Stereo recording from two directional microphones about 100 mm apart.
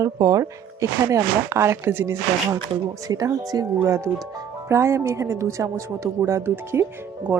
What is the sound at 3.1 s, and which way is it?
Speech, 40° right (ahead or behind).